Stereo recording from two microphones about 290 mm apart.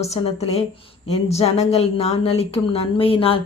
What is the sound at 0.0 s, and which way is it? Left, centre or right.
A woman's voice, left.